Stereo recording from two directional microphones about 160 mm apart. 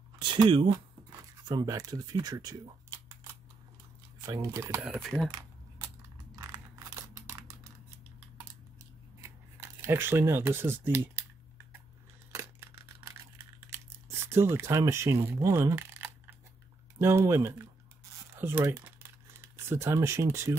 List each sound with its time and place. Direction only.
0.2 s speech: 30° right (ahead or behind)
4.3 s speech: 20° right (ahead or behind)
4.8 s speech: 5° right (ahead or behind)
6.3 s a sound: 20° right (ahead or behind)
9.2 s a sound: 15° right (ahead or behind)
13.7 s camera: 15° right (ahead or behind)
17.0 s speech: 15° right (ahead or behind)
18.3 s crumpling: 15° right (ahead or behind)